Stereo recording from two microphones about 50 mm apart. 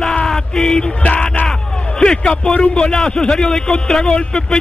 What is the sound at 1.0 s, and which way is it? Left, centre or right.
Music, left.